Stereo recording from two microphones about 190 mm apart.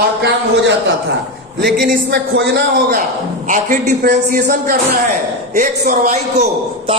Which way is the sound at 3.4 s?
45° right (ahead or behind).